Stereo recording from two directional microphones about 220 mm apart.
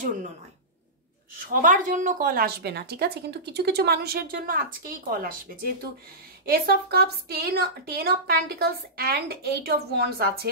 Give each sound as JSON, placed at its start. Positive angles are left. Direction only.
{"t": 1.5, "sound": "a woman's voice", "side_deg": -35}
{"t": 6.4, "sound": "a woman's voice", "side_deg": -45}